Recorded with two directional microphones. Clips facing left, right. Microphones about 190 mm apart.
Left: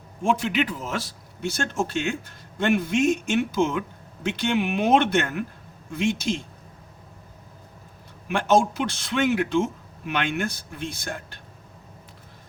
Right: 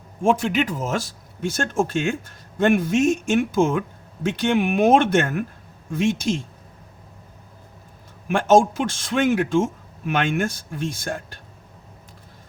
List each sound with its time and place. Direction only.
0.2 s speech: 45° right (ahead or behind)
8.3 s speech: 45° right (ahead or behind)